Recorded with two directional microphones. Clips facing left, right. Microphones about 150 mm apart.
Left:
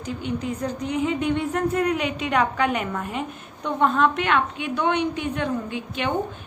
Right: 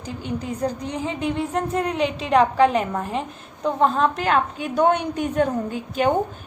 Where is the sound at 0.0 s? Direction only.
35° right (ahead or behind).